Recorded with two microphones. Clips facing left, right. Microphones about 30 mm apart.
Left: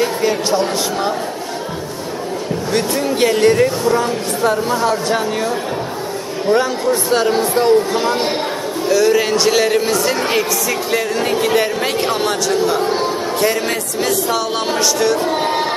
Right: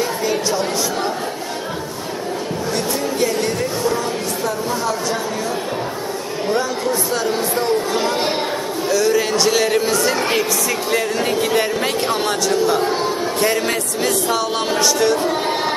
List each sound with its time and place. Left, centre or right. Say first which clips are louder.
0.0 s a woman's voice: left 3 dB; left
2.7 s speech: left 5 dB; left
6.5 s speech: left 5 dB; left
7.9 s a man's voice: left 2 dB; centre